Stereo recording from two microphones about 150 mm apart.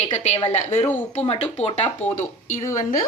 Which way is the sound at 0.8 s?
15° left (ahead or behind).